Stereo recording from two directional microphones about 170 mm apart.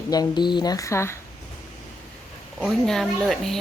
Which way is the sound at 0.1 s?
25° left (ahead or behind).